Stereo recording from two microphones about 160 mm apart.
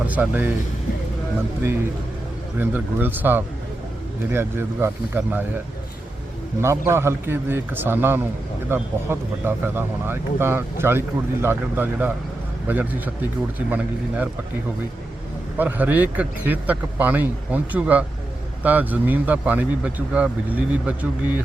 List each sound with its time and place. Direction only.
0.0 s speech: 10° right (ahead or behind)
2.6 s speech: 10° right (ahead or behind)
6.6 s speech: 15° right (ahead or behind)
15.5 s speech: 10° right (ahead or behind)